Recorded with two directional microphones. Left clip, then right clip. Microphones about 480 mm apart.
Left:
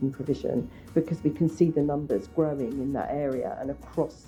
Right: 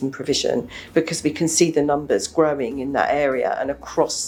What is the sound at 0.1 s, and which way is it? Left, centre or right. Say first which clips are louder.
Speech: right 8 dB; centre.